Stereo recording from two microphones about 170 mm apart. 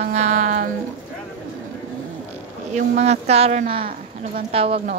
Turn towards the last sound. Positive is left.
turn(degrees=-35)  # may be behind; listen again after turning